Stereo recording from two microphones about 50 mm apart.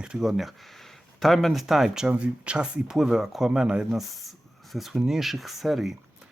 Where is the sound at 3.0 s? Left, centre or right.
Centre.